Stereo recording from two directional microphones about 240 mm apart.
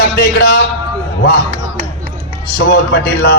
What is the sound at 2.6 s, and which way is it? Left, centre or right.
Speech, left.